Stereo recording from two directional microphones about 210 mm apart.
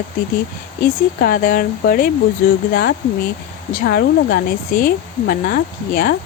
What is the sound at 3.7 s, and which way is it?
Speech, 45° left (ahead or behind).